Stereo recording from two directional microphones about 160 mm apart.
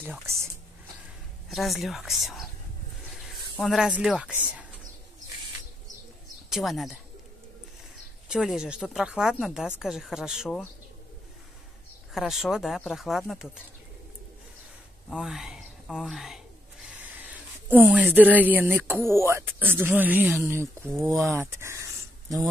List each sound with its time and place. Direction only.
0.0 s speech: 5° right (ahead or behind)
1.5 s speech: centre (ahead or behind)
3.6 s speech: 5° right (ahead or behind)
6.5 s speech: centre (ahead or behind)
8.3 s speech: 5° right (ahead or behind)
12.1 s speech: centre (ahead or behind)
15.0 s speech: 5° right (ahead or behind)
21.3 s a sound: 15° right (ahead or behind)